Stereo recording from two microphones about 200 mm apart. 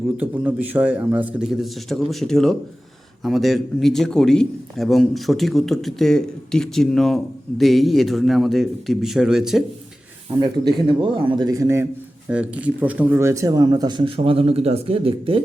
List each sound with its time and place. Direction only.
0.2 s a man's voice: 10° right (ahead or behind)
10.4 s speech: 20° right (ahead or behind)